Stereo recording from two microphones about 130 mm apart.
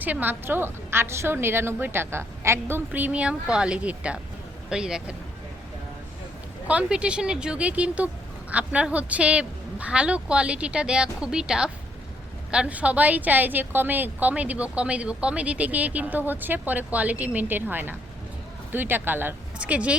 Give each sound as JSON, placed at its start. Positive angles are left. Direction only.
{"t": 0.0, "sound": "a woman's voice", "side_deg": -15}
{"t": 6.7, "sound": "a woman's voice", "side_deg": -10}